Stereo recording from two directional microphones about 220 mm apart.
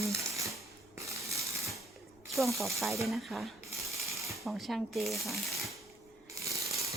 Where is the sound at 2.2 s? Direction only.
Centre (ahead or behind).